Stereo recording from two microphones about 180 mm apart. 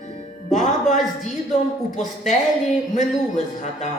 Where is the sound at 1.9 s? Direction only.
40° left (ahead or behind).